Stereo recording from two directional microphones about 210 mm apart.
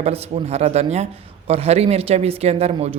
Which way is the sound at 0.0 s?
30° right (ahead or behind).